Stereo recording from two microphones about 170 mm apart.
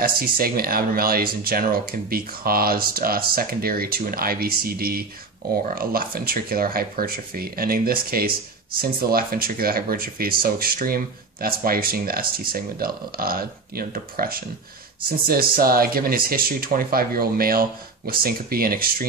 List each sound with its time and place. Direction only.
0.0 s speech: 60° right (ahead or behind)